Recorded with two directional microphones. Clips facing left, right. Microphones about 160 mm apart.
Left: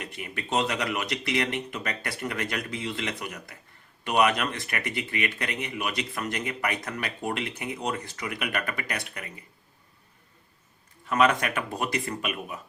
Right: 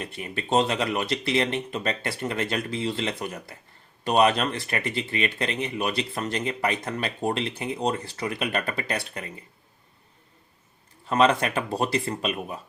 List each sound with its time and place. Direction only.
0.0 s speech: 30° right (ahead or behind)
11.0 s speech: 30° right (ahead or behind)